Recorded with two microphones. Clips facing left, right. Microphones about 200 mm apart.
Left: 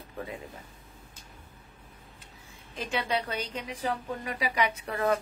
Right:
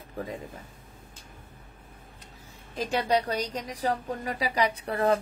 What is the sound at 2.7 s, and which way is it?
A woman's voice, 40° right (ahead or behind).